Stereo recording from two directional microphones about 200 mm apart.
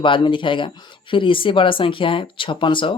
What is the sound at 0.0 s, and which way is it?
Speech, 25° left (ahead or behind).